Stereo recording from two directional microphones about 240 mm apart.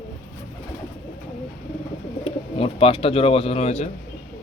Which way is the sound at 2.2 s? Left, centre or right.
Left.